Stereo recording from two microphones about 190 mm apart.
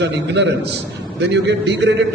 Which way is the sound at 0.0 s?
65° right (ahead or behind).